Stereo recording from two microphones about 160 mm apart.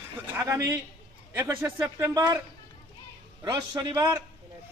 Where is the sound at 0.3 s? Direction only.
15° right (ahead or behind).